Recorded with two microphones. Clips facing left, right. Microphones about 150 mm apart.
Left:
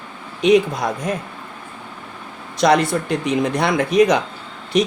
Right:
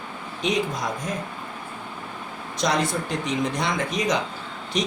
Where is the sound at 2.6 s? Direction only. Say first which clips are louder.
Left 8 dB; 65° left (ahead or behind).